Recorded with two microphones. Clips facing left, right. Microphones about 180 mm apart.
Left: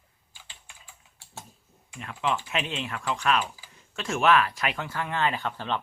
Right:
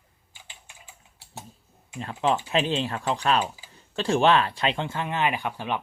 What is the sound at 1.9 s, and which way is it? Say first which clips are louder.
Speech: right 4 dB; 25° right (ahead or behind).